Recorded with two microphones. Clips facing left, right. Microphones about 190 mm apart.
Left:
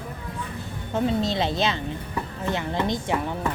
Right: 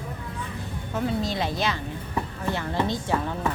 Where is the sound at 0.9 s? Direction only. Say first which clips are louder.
Left 3 dB; 25° left (ahead or behind).